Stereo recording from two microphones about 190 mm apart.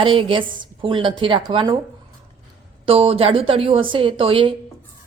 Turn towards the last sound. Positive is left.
turn(degrees=-30)  # may be behind; listen again after turning